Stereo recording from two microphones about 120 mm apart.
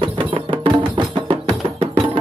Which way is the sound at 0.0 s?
45° right (ahead or behind).